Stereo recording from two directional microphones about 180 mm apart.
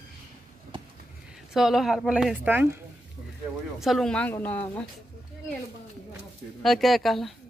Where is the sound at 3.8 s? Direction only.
Centre (ahead or behind).